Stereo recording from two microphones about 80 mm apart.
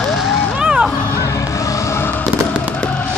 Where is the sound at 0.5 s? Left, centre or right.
Centre.